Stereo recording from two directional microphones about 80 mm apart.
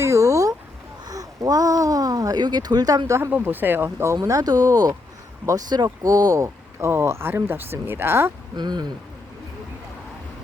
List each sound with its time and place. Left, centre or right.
0.0 s a sound: right
3.1 s speech: right
8.5 s speech: right